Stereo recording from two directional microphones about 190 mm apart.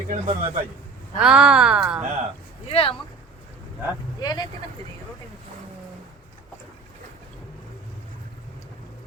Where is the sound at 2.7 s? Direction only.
30° left (ahead or behind).